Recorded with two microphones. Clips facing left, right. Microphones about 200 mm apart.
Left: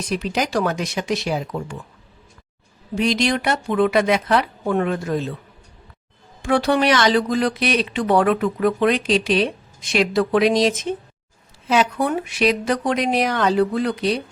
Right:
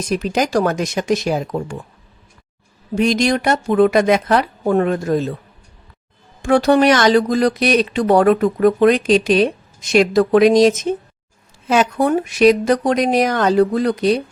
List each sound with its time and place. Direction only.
0.1 s speech: 45° right (ahead or behind)
2.9 s speech: 45° right (ahead or behind)
6.4 s speech: 45° right (ahead or behind)